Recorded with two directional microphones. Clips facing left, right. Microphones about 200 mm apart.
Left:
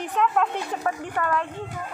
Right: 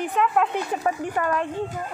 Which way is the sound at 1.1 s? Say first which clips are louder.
Right 2 dB; 20° right (ahead or behind).